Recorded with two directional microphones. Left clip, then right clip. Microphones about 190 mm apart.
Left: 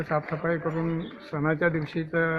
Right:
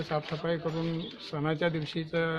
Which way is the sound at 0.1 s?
20° right (ahead or behind).